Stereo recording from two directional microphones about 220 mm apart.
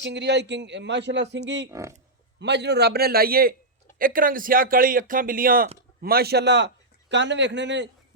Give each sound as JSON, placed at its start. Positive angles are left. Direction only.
{"t": 0.0, "sound": "a man's voice", "side_deg": -50}